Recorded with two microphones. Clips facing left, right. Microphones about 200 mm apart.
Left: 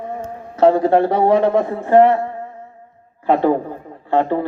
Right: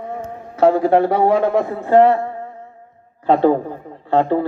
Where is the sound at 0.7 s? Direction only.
25° left (ahead or behind).